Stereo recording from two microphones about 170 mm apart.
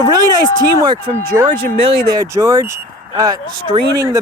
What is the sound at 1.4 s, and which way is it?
Speech, 30° right (ahead or behind).